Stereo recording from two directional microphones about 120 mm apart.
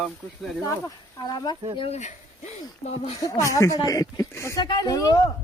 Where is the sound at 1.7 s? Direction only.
60° left (ahead or behind).